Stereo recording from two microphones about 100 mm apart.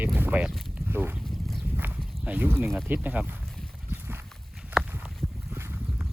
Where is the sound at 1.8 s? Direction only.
15° right (ahead or behind).